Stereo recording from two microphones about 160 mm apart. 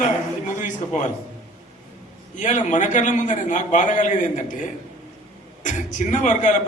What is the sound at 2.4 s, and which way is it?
A man's voice, 50° left (ahead or behind).